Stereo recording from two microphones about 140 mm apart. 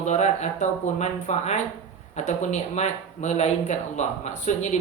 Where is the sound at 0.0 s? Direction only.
55° left (ahead or behind).